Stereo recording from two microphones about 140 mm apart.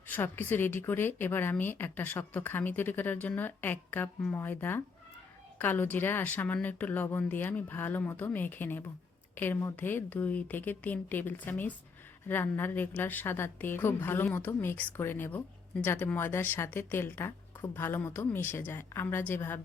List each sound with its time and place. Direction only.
0.1 s a woman's voice: 15° left (ahead or behind)